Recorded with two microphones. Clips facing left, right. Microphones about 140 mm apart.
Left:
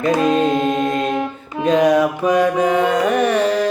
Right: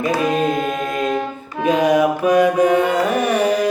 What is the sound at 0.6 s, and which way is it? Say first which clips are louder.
Mantra: left 4 dB; 25° left (ahead or behind).